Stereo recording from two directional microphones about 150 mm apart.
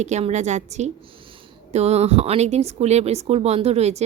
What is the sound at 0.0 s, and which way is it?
Speech, 50° right (ahead or behind).